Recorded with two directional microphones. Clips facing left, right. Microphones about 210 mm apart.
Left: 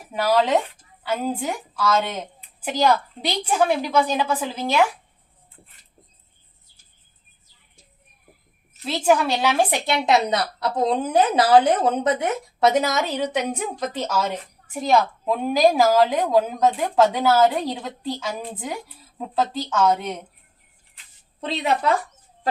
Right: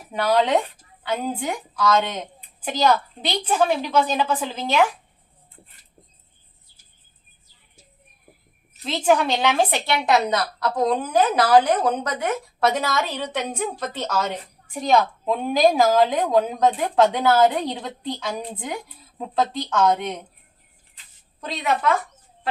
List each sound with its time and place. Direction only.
0.1 s a woman's voice: 5° left (ahead or behind)
8.8 s a woman's voice: 10° left (ahead or behind)
9.9 s a woman's voice: 25° left (ahead or behind); by 20.2 s 5° left (ahead or behind)
21.4 s a woman's voice: 30° left (ahead or behind)